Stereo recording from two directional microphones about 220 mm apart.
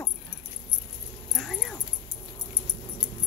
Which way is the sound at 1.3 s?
Centre (ahead or behind).